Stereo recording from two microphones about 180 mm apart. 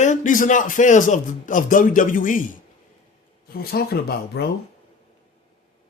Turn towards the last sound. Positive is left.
turn(degrees=60)  # may be behind; listen again after turning